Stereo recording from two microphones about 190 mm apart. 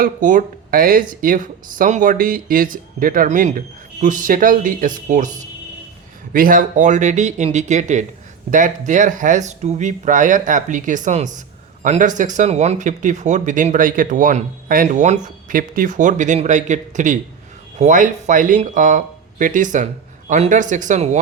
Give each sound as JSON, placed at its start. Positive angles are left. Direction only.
{"t": 0.0, "sound": "speech", "side_deg": -45}